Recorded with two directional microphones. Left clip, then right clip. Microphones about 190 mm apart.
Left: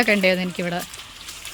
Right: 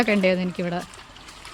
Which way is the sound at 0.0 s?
5° right (ahead or behind).